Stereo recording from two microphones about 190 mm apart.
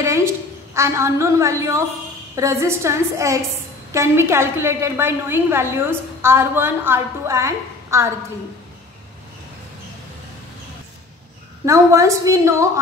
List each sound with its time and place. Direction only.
0.0 s a sound: 15° right (ahead or behind)
0.7 s a woman's voice: 15° right (ahead or behind)
11.6 s a woman's voice: 15° right (ahead or behind)